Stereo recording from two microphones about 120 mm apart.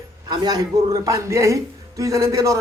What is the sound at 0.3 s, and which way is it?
Speech, 35° right (ahead or behind).